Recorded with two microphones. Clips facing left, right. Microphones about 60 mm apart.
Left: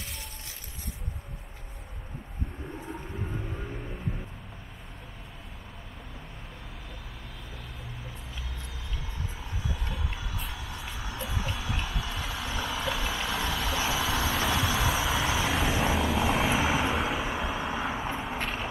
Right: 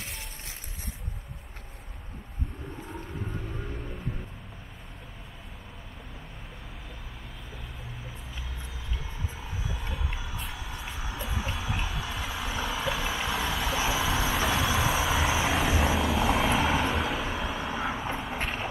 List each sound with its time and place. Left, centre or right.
2.9 s music: centre
9.4 s music: centre
15.6 s vehicle: centre